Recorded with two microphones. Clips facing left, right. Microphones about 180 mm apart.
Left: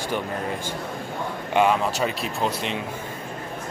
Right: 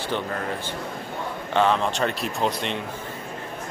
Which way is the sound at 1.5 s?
10° left (ahead or behind).